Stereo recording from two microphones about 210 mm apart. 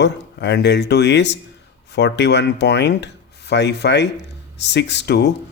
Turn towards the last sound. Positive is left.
turn(degrees=55)  # may be behind; listen again after turning